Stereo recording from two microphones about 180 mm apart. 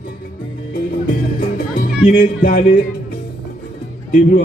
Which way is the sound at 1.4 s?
50° left (ahead or behind).